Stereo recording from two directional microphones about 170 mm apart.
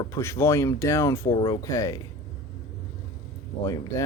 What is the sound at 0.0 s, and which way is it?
Speech, 15° left (ahead or behind).